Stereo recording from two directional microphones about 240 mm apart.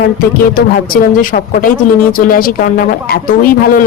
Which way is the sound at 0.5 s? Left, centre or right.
Left.